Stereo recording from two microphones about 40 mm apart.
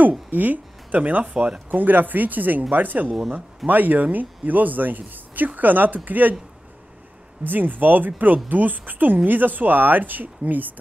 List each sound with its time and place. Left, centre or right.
0.3 s speech: right
7.4 s speech: right